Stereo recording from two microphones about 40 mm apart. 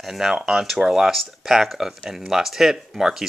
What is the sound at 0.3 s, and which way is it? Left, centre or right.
Speech, centre.